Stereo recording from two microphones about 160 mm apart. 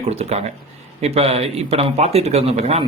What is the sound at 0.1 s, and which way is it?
A man's voice, 40° right (ahead or behind).